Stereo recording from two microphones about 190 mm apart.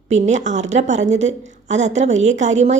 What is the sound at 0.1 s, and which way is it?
A woman's voice, 40° right (ahead or behind).